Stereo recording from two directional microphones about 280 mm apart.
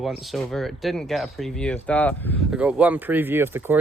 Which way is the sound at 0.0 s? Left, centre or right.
Centre.